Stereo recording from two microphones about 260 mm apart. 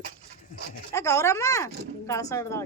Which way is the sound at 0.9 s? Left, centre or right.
Centre.